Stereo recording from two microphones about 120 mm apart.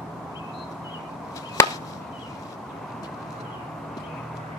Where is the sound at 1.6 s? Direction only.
20° left (ahead or behind).